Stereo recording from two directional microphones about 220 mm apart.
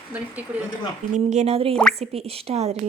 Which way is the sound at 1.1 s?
30° right (ahead or behind).